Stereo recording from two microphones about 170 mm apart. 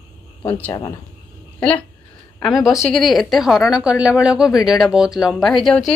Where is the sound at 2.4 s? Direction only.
Centre (ahead or behind).